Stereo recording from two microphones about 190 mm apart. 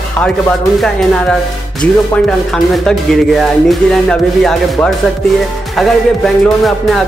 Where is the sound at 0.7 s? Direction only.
5° left (ahead or behind).